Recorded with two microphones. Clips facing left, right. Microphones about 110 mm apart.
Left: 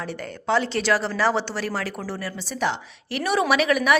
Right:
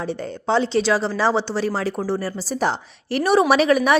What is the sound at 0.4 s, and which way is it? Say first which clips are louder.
Speech: right 3 dB; 25° right (ahead or behind).